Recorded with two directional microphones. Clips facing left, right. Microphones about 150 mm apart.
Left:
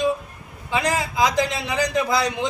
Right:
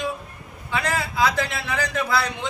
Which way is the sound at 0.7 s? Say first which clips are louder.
Left 3 dB; 15° left (ahead or behind).